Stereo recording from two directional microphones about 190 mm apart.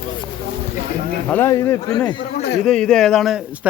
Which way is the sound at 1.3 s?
15° left (ahead or behind).